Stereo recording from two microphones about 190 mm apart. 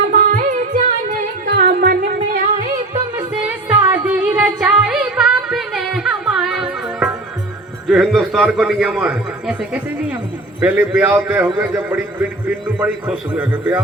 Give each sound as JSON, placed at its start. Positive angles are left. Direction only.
{"t": 0.1, "sound": "carnatic music", "side_deg": -45}
{"t": 1.5, "sound": "music", "side_deg": -60}
{"t": 3.2, "sound": "music", "side_deg": -10}
{"t": 7.9, "sound": "a man's voice", "side_deg": 0}